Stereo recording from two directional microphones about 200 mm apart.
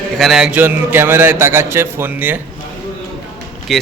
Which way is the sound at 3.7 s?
Centre (ahead or behind).